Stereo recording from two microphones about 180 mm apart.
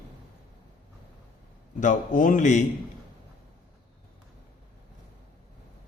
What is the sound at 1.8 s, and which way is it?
Speech, 45° left (ahead or behind).